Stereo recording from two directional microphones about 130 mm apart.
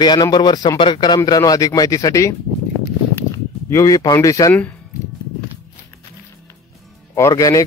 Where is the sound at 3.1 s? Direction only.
20° left (ahead or behind).